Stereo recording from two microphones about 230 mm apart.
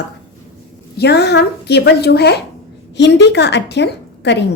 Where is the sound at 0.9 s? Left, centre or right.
Left.